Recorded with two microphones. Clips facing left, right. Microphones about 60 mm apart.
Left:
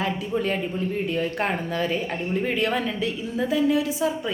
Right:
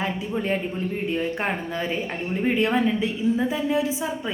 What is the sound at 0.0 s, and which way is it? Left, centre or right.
A woman's voice, right.